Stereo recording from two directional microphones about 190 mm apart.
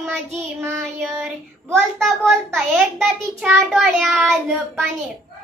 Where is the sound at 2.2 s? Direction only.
Centre (ahead or behind).